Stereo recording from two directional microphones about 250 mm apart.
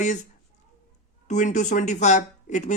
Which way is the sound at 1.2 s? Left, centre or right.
Left.